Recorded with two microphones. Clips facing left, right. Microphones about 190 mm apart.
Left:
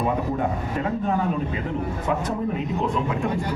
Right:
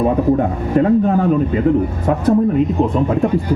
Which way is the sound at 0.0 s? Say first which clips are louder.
Right 9 dB; 45° right (ahead or behind).